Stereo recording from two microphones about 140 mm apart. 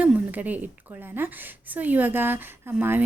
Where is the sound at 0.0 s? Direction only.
10° right (ahead or behind).